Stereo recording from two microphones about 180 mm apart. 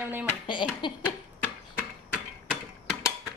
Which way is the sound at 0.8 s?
25° left (ahead or behind).